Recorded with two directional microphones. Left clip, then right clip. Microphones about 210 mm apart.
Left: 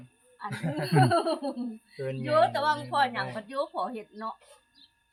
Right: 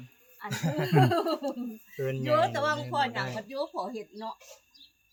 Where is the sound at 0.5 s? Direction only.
55° right (ahead or behind).